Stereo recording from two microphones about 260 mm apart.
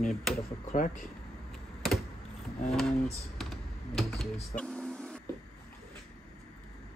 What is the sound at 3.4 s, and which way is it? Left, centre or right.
Computer keyboard, centre.